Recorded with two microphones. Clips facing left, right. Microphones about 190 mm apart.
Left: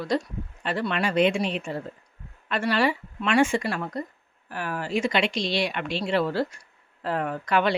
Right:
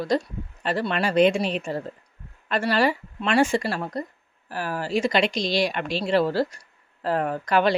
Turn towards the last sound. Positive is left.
turn(degrees=-40)  # may be behind; listen again after turning